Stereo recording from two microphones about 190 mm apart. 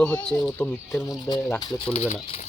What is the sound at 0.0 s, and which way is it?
Speech, 5° left (ahead or behind).